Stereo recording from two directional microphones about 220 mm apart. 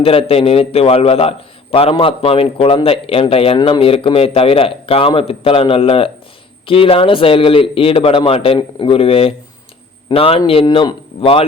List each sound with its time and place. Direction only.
0.0 s a man's voice: 25° left (ahead or behind)